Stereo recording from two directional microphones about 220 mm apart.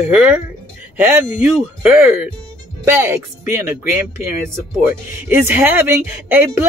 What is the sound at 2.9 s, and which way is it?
Speech, 10° right (ahead or behind).